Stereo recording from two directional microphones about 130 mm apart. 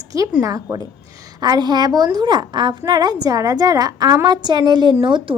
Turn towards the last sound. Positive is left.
turn(degrees=-40)  # may be behind; listen again after turning